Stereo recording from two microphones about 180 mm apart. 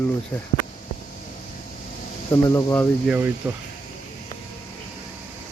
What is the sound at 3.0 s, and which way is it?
Speech, 10° right (ahead or behind).